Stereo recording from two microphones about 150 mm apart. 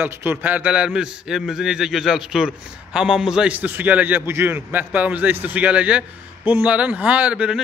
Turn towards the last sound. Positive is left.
turn(degrees=-5)  # may be behind; listen again after turning